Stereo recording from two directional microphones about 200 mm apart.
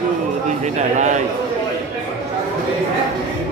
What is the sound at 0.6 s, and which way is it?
Speech, 35° right (ahead or behind).